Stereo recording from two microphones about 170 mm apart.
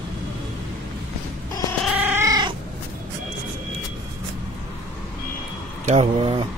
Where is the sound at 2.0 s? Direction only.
10° right (ahead or behind).